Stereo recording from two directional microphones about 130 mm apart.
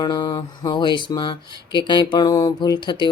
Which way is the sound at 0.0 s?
35° left (ahead or behind).